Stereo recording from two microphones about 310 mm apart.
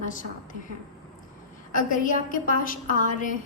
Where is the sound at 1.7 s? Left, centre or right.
Left.